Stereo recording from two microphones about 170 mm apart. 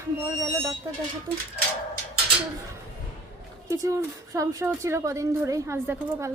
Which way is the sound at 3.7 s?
20° right (ahead or behind).